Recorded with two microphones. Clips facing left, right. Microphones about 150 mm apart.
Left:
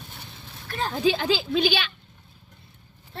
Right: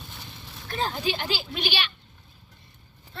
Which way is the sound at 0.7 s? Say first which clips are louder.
Right 1 dB; 30° right (ahead or behind).